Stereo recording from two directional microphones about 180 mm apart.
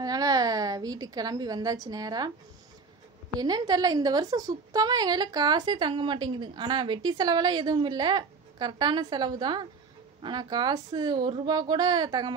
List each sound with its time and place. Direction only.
0.0 s a woman's voice: 20° right (ahead or behind)
3.3 s a woman's voice: 20° right (ahead or behind)